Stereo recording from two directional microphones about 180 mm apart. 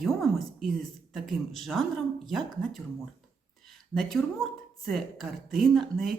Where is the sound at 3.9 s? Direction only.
Centre (ahead or behind).